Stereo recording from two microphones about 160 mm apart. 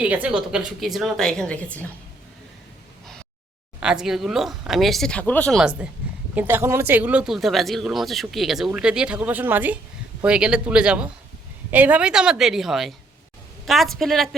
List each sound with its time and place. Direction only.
0.0 s speech: 10° right (ahead or behind); by 1.9 s 10° left (ahead or behind)
3.8 s speech: 5° right (ahead or behind)
6.3 s speech: 15° right (ahead or behind); by 14.3 s centre (ahead or behind)